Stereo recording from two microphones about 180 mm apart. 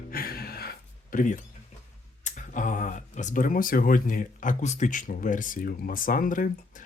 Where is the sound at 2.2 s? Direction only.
45° left (ahead or behind).